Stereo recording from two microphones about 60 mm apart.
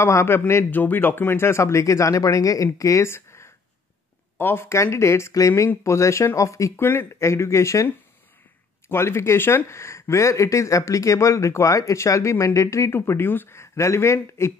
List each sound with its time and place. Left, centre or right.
0.0 s speech: left
0.7 s speech: left
3.1 s a sound: left
4.4 s speech: left
4.6 s speech: left
6.8 s speech: left
13.6 s speech: left